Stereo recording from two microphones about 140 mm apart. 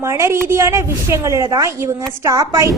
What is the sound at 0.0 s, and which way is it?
A child's voice, 20° right (ahead or behind).